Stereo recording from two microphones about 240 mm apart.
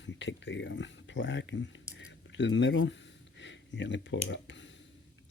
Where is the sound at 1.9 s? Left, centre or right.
Left.